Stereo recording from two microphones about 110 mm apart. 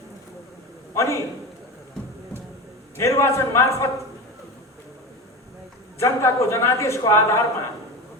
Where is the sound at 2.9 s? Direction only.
25° left (ahead or behind).